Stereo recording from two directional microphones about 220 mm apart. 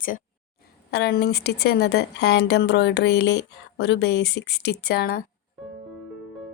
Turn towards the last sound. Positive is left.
turn(degrees=45)  # may be behind; listen again after turning